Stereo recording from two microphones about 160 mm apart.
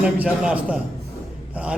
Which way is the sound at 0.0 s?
5° right (ahead or behind).